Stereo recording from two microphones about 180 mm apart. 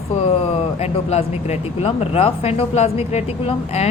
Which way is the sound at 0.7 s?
35° left (ahead or behind).